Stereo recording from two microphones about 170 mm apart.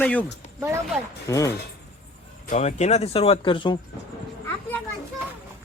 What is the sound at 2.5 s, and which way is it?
Speech, 40° left (ahead or behind).